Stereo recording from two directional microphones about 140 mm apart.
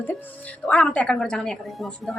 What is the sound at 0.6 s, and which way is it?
A woman's voice, 10° left (ahead or behind).